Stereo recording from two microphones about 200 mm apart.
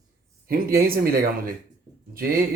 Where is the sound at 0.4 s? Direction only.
45° right (ahead or behind).